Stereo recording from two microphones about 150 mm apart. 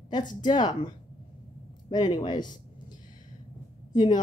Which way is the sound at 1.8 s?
30° left (ahead or behind).